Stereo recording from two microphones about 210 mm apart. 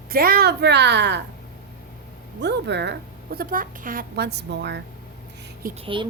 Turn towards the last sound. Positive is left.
turn(degrees=-25)  # may be behind; listen again after turning